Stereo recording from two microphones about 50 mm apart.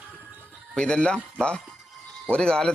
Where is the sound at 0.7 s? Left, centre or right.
Centre.